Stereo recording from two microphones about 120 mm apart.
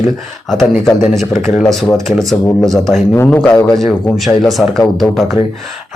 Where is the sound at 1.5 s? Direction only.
5° left (ahead or behind).